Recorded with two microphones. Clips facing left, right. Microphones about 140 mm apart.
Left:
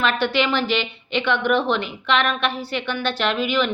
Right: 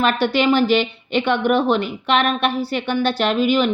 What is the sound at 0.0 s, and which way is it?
A woman's voice, 40° right (ahead or behind).